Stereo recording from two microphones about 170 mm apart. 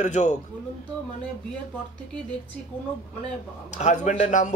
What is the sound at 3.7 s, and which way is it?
Speech, 45° left (ahead or behind).